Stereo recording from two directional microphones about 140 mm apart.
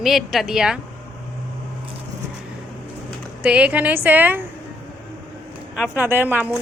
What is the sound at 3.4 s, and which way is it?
A woman's voice, 10° right (ahead or behind).